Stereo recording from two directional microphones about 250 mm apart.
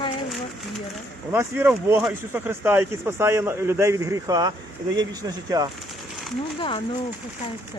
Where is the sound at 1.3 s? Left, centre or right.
Centre.